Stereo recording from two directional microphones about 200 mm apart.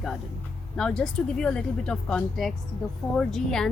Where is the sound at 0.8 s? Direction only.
5° left (ahead or behind).